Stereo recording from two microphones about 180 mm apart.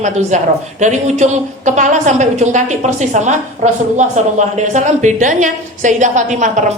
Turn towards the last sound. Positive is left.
turn(degrees=-40)  # may be behind; listen again after turning